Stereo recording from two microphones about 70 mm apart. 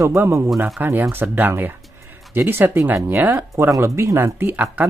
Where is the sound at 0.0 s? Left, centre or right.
Right.